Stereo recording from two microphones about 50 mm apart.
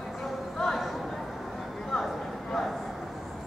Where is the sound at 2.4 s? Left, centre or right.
Centre.